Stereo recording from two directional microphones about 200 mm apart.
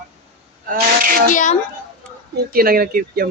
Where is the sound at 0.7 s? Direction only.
45° right (ahead or behind).